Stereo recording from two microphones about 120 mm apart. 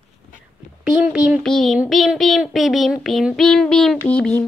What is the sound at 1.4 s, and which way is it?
Child singing, 5° left (ahead or behind).